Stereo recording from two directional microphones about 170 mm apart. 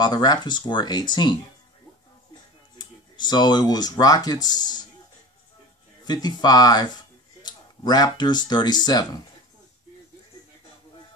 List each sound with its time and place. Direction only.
0.0 s speech: 25° left (ahead or behind)
2.8 s speech: 25° left (ahead or behind)
6.0 s speech: 25° left (ahead or behind)